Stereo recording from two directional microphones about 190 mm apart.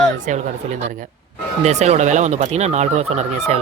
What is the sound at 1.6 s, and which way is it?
Speech, 35° right (ahead or behind).